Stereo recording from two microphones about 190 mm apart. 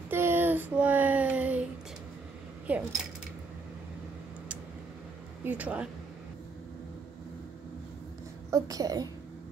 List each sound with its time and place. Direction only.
0.1 s a sound: 10° right (ahead or behind)
2.7 s speech: 5° right (ahead or behind)
5.4 s speech: 10° right (ahead or behind)
8.5 s a child's voice: 15° right (ahead or behind)